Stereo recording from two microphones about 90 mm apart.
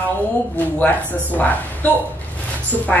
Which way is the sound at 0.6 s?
20° left (ahead or behind).